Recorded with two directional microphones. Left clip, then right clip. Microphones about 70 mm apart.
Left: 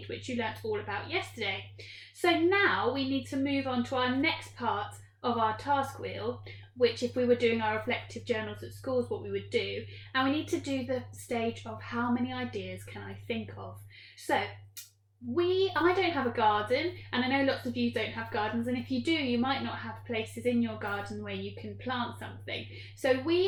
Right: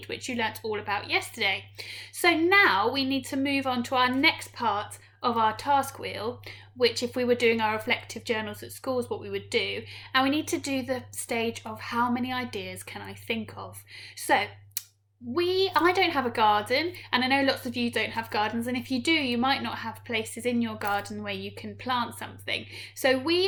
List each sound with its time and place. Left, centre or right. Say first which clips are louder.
0.1 s speech: right 5 dB; right
15.4 s speech: right 4 dB; right
22.4 s speech: right 8 dB; right